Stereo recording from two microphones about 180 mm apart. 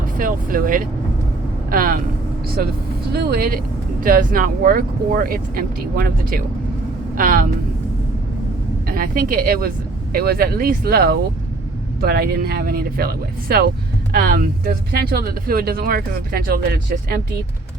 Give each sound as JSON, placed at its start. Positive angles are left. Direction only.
{"t": 0.0, "sound": "speech", "side_deg": -50}
{"t": 3.1, "sound": "speech", "side_deg": -60}
{"t": 8.9, "sound": "speech", "side_deg": -50}